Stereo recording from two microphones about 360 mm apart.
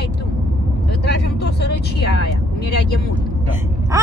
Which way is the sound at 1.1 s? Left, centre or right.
Left.